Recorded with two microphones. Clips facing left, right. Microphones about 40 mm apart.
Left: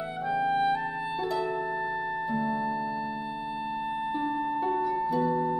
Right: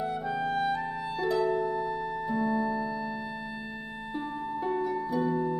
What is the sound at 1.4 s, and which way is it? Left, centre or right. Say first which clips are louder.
Music: right 2 dB; centre.